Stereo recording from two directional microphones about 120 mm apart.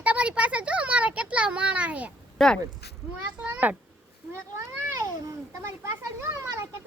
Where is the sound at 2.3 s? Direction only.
5° left (ahead or behind).